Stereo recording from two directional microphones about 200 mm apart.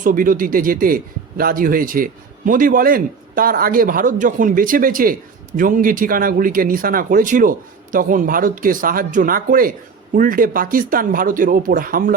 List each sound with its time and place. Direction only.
0.0 s a man's voice: 45° right (ahead or behind)